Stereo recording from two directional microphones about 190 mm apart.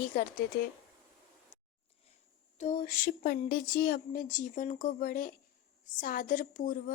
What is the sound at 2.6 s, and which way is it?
A woman's voice, 45° left (ahead or behind).